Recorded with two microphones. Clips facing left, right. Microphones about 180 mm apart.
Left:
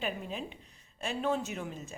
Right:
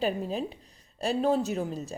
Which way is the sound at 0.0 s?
35° right (ahead or behind).